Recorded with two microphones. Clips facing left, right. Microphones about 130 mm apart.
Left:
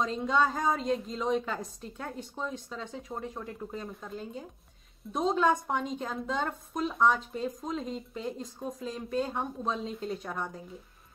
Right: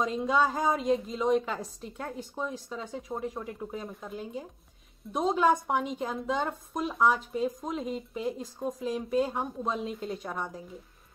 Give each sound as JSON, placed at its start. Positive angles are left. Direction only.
{"t": 0.0, "sound": "a woman's voice", "side_deg": -10}